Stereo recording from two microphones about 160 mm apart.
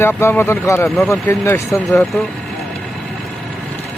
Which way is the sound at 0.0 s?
15° left (ahead or behind).